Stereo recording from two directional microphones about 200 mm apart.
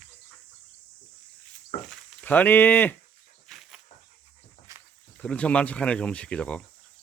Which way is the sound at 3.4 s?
Centre (ahead or behind).